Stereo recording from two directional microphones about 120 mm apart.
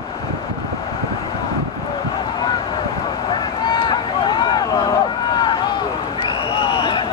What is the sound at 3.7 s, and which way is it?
Run, 40° left (ahead or behind).